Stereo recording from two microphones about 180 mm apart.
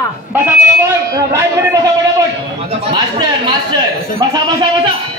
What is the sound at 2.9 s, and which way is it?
Speech, 25° right (ahead or behind).